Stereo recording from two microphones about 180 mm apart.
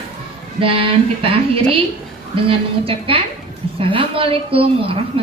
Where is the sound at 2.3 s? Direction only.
30° right (ahead or behind).